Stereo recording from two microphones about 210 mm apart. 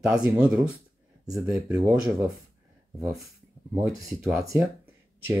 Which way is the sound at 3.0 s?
Centre (ahead or behind).